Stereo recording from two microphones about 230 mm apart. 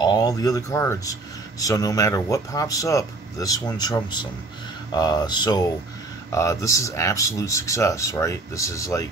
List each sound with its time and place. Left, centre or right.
0.0 s speech: centre